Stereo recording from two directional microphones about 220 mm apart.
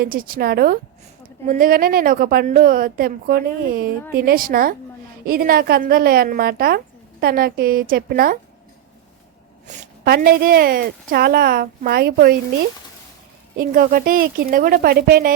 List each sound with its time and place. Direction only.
0.0 s a woman's voice: 45° right (ahead or behind)
9.6 s a woman's voice: 40° right (ahead or behind)
13.6 s a woman's voice: 40° right (ahead or behind)